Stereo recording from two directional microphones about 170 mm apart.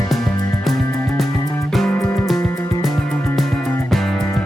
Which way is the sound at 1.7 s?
Centre (ahead or behind).